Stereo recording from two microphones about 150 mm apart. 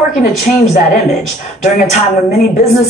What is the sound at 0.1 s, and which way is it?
Speech, 65° left (ahead or behind).